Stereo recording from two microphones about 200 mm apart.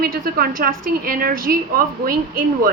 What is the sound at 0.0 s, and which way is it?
A woman's voice, 50° right (ahead or behind).